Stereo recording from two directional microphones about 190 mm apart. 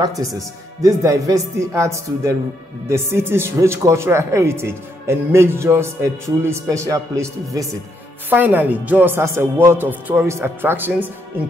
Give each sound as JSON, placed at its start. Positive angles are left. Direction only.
{"t": 0.2, "sound": "speech", "side_deg": -20}